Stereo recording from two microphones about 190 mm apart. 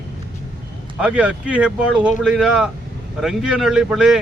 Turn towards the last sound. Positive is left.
turn(degrees=-5)  # may be behind; listen again after turning